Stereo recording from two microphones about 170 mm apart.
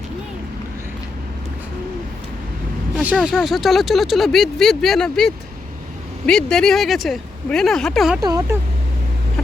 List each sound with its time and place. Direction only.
3.2 s speech: 5° right (ahead or behind)
8.2 s speech: 20° right (ahead or behind)